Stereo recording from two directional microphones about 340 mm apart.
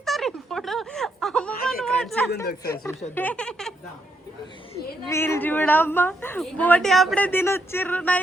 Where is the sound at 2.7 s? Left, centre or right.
Centre.